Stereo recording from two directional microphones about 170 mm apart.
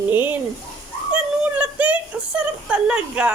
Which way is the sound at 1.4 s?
10° right (ahead or behind).